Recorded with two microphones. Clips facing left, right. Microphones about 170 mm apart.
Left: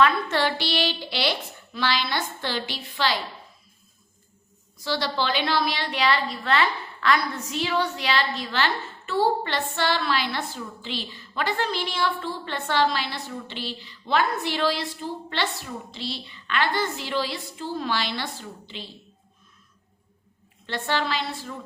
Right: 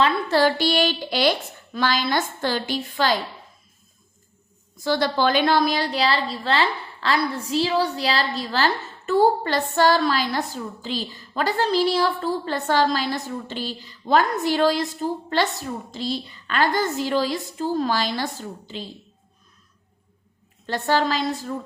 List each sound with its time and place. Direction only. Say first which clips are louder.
0.0 s a woman's voice: right 3 dB; 35° right (ahead or behind)
4.8 s a woman's voice: right 6 dB; 50° right (ahead or behind)
20.7 s a woman's voice: right 5 dB; 40° right (ahead or behind)